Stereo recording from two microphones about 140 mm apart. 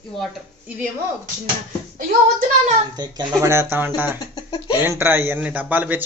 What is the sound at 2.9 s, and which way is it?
Speech, 30° right (ahead or behind).